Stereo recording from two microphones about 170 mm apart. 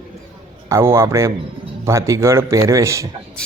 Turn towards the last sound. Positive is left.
turn(degrees=-20)  # may be behind; listen again after turning